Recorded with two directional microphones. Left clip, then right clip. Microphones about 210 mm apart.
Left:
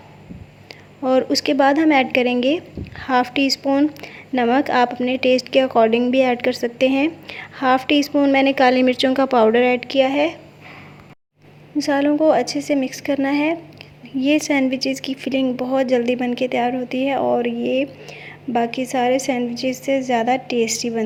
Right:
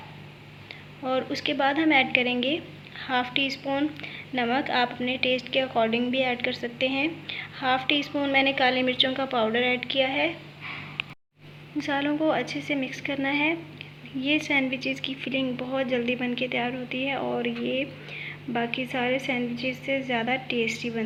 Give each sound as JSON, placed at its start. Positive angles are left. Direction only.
{"t": 1.0, "sound": "a woman's voice", "side_deg": 55}
{"t": 11.8, "sound": "a woman's voice", "side_deg": 50}